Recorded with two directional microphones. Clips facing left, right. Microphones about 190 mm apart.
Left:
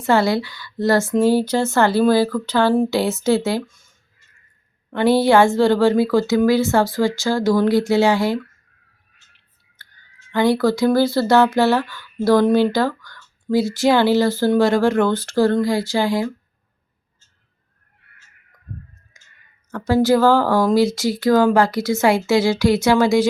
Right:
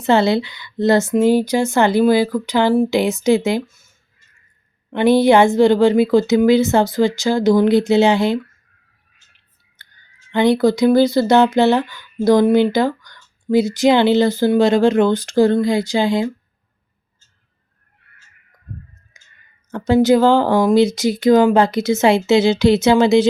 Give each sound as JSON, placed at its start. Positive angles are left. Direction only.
{"t": 0.0, "sound": "speech", "side_deg": -20}
{"t": 3.7, "sound": "a sound", "side_deg": -5}
{"t": 4.9, "sound": "speech", "side_deg": -20}
{"t": 9.8, "sound": "clicking", "side_deg": -20}
{"t": 10.3, "sound": "speech", "side_deg": -20}
{"t": 19.1, "sound": "clicking", "side_deg": -20}
{"t": 19.7, "sound": "speech", "side_deg": -20}